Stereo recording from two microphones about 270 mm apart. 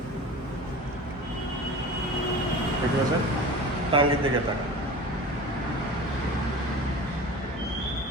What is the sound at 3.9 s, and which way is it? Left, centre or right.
Speech, centre.